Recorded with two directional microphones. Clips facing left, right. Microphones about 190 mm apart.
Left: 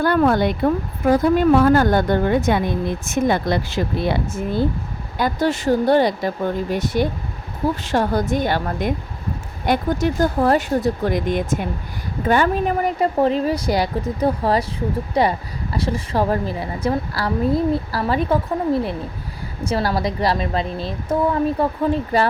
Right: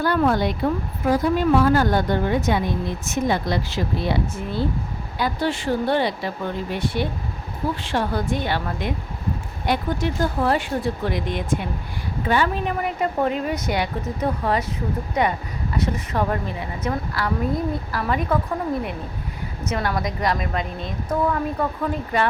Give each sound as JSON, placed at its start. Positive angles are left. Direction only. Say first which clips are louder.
{"t": 0.0, "sound": "speech", "louder": "left 3 dB", "side_deg": 55}